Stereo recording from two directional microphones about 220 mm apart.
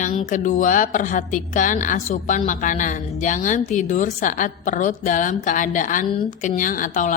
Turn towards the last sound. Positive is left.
turn(degrees=35)  # may be behind; listen again after turning